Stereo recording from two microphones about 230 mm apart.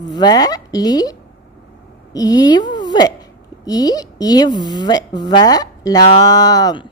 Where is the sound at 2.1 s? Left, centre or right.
Centre.